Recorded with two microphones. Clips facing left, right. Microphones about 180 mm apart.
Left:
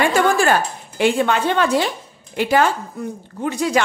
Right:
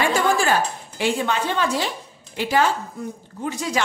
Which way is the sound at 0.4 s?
60° left (ahead or behind).